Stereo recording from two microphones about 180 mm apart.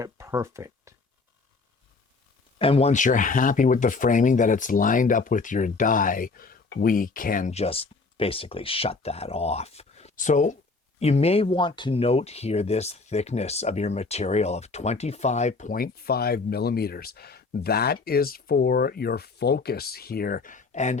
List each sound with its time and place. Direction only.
0.0 s speech: 15° right (ahead or behind)
2.6 s speech: 30° left (ahead or behind)